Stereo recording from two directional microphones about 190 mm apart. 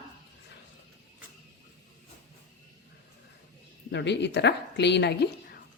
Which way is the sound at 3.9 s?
65° left (ahead or behind).